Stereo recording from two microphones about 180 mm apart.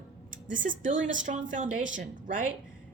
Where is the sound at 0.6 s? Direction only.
50° right (ahead or behind).